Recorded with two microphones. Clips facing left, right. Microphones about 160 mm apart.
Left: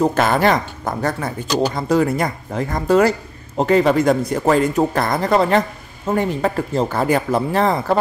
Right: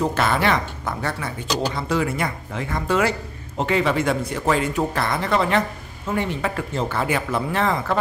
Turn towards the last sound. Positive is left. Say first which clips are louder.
# left 5 dB
turn(degrees=35)  # may be behind; listen again after turning